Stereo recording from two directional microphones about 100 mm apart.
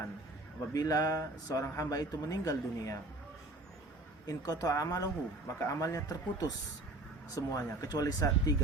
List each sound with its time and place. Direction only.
0.7 s speech: 35° left (ahead or behind)
4.3 s speech: 35° left (ahead or behind)